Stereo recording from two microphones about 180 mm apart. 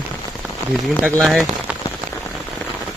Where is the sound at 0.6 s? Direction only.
15° left (ahead or behind).